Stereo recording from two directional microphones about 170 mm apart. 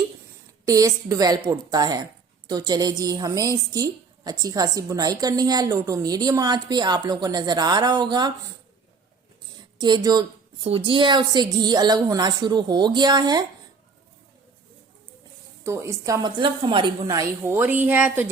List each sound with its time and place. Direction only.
0.6 s a woman's voice: 20° right (ahead or behind)
9.8 s a woman's voice: 25° right (ahead or behind)
15.6 s a woman's voice: 15° right (ahead or behind)